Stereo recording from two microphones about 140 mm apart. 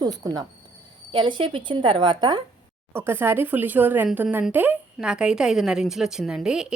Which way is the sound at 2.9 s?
15° right (ahead or behind).